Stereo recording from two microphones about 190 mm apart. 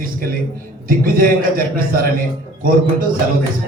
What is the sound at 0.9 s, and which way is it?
A man's voice, 50° right (ahead or behind).